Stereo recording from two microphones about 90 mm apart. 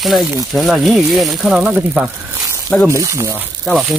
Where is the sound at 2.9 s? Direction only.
35° right (ahead or behind).